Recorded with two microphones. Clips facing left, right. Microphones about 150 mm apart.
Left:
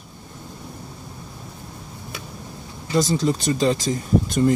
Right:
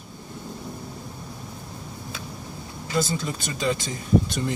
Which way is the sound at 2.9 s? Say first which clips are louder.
Left 6 dB; 40° left (ahead or behind).